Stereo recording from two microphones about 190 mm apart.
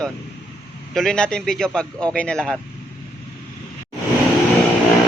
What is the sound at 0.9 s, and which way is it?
Speech, 5° left (ahead or behind).